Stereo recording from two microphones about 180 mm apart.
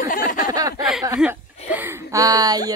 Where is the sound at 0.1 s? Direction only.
50° left (ahead or behind).